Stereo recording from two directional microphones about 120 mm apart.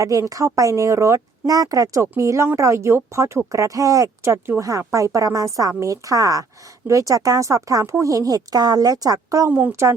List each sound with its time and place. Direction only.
0.0 s speech: 30° right (ahead or behind)
9.5 s speech: 15° right (ahead or behind)